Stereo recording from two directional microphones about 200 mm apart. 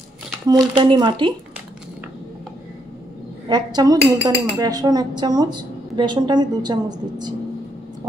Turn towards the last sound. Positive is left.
turn(degrees=-20)  # may be behind; listen again after turning